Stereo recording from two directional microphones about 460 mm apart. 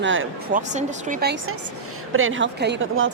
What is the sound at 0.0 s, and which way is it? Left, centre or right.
Speech, right.